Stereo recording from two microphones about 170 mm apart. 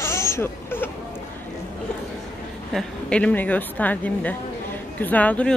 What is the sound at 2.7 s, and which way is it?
Speech, 5° left (ahead or behind).